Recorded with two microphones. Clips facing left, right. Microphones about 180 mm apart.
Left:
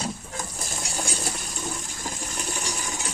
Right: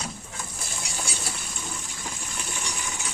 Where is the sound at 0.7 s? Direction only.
40° left (ahead or behind).